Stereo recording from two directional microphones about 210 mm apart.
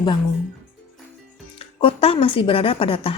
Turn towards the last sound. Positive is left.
turn(degrees=25)  # may be behind; listen again after turning